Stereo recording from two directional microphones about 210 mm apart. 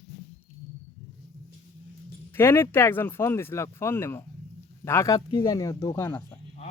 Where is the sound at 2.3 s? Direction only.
10° left (ahead or behind).